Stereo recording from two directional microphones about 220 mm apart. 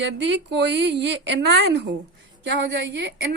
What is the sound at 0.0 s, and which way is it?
A woman's voice, 55° right (ahead or behind).